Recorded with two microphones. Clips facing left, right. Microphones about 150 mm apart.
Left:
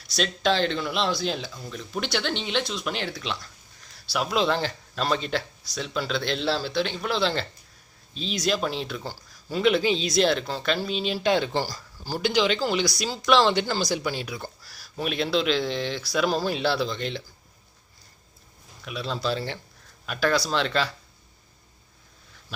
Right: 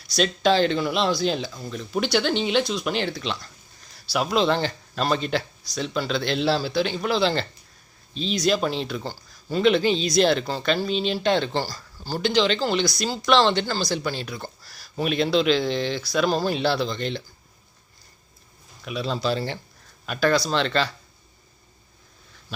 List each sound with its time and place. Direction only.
0.2 s speech: centre (ahead or behind)
18.9 s speech: centre (ahead or behind)